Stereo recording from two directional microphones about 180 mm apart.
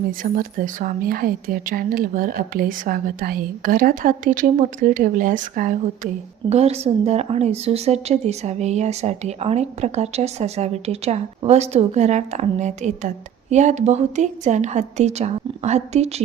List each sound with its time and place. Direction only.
0.2 s a woman's voice: 50° right (ahead or behind)
6.5 s a woman's voice: 35° right (ahead or behind)